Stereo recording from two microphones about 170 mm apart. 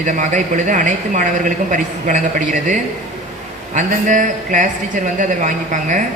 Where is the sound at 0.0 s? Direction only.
45° right (ahead or behind).